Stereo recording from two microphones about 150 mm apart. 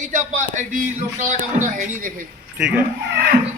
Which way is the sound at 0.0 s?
55° right (ahead or behind).